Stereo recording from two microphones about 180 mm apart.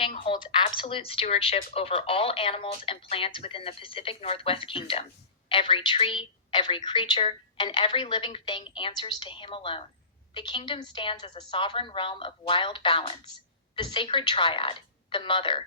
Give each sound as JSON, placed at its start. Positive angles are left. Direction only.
{"t": 0.3, "sound": "a woman's voice", "side_deg": 25}